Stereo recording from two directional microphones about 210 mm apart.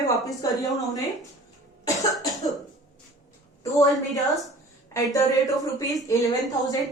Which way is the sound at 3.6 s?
15° left (ahead or behind).